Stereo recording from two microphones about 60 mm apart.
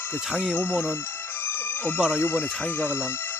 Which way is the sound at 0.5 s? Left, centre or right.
Left.